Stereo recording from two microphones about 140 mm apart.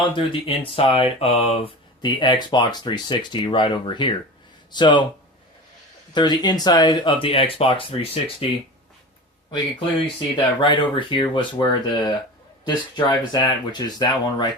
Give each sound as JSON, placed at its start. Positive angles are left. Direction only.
{"t": 0.3, "sound": "speech", "side_deg": 40}
{"t": 6.1, "sound": "speech", "side_deg": 30}
{"t": 10.2, "sound": "speech", "side_deg": 35}